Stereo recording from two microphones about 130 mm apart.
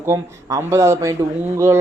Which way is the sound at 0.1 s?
20° right (ahead or behind).